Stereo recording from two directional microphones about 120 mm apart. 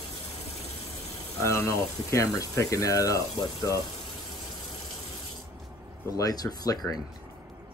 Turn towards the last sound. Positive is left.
turn(degrees=35)  # may be behind; listen again after turning